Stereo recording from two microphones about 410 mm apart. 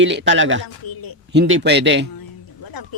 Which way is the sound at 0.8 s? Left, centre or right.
Left.